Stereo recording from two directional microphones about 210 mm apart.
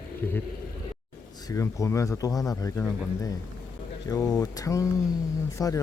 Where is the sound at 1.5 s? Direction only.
15° left (ahead or behind).